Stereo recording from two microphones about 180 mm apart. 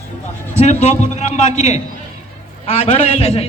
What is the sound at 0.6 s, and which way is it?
Speech, 40° left (ahead or behind).